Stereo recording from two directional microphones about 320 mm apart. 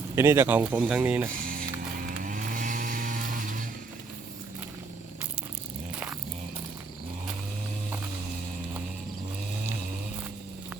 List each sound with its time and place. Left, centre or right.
0.2 s speech: centre
1.4 s music: right
2.0 s vehicle: right